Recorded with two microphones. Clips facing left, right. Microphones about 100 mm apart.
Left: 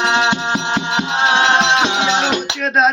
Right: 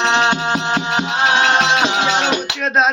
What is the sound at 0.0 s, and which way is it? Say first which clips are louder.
Music: even; 10° left (ahead or behind).